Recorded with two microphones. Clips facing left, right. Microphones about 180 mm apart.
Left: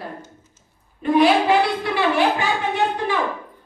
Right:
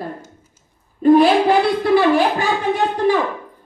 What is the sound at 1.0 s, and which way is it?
A woman's voice, 40° right (ahead or behind).